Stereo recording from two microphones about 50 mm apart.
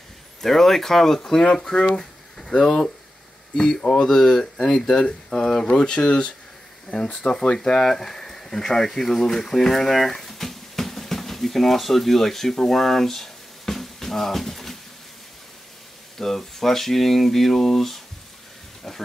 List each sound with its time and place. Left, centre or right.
0.4 s speech: centre
2.0 s a sound: centre
3.5 s speech: centre
5.0 s speech: left
16.2 s speech: centre
18.9 s pig: centre